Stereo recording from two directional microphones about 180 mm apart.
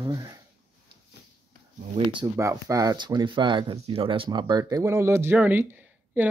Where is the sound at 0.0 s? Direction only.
20° right (ahead or behind).